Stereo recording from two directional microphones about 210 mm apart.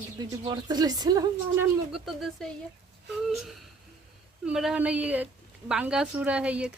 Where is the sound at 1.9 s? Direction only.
Centre (ahead or behind).